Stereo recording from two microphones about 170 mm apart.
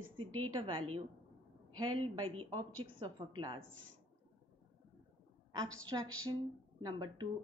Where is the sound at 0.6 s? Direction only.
30° right (ahead or behind).